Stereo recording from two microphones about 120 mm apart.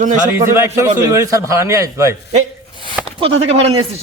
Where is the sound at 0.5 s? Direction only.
25° right (ahead or behind).